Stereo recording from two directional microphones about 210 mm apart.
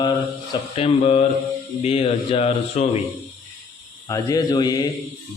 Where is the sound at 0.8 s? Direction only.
30° left (ahead or behind).